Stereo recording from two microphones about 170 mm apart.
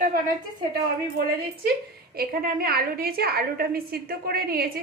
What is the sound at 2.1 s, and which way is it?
A woman's voice, 60° right (ahead or behind).